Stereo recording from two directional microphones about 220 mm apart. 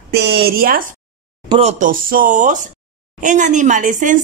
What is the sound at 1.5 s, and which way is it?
A woman's voice, 30° right (ahead or behind).